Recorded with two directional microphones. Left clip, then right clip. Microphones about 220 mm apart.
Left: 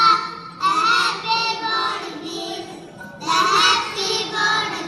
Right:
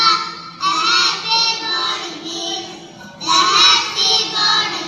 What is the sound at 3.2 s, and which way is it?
Child singing, 30° left (ahead or behind).